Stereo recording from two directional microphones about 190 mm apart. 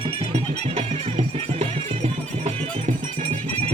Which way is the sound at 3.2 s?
30° right (ahead or behind).